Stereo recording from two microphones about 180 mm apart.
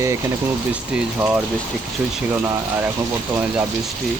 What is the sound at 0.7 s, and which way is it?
Speech, 5° right (ahead or behind).